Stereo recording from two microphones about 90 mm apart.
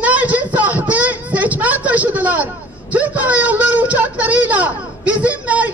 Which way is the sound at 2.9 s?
15° right (ahead or behind).